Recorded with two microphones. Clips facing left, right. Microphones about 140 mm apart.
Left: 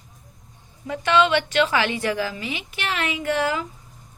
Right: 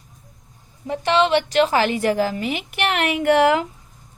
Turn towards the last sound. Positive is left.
turn(degrees=-70)  # may be behind; listen again after turning